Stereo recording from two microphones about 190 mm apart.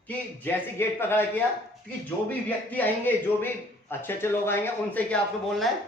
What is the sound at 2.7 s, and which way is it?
A man's voice, 10° left (ahead or behind).